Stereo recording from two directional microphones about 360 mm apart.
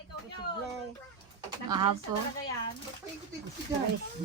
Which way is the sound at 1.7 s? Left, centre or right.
Centre.